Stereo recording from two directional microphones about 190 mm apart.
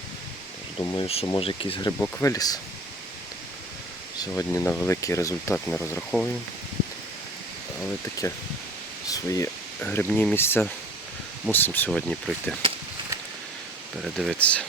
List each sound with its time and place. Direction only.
0.8 s speech: 20° left (ahead or behind)
1.0 s speech: 30° left (ahead or behind)
2.0 s speech: 15° left (ahead or behind)
4.4 s speech: 10° left (ahead or behind)
8.2 s speech: 15° left (ahead or behind)
14.0 s speech: centre (ahead or behind)